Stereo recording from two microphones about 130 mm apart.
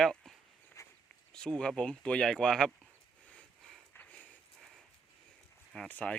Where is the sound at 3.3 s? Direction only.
5° left (ahead or behind).